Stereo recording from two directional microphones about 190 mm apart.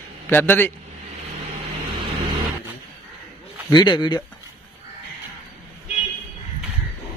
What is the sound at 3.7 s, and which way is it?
Speech, 25° left (ahead or behind).